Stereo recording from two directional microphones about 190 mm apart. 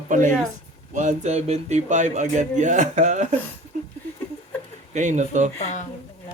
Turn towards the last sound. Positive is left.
turn(degrees=40)  # may be behind; listen again after turning